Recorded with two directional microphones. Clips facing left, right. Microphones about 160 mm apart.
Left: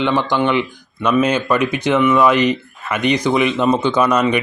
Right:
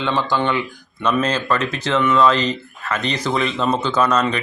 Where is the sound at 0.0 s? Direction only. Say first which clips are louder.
Left 3 dB; 15° left (ahead or behind).